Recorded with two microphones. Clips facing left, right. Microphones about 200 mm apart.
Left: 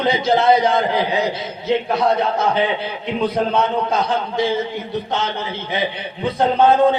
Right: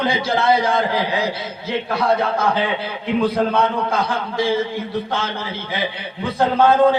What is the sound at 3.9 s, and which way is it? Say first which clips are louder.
Speech: left 2 dB; 20° left (ahead or behind).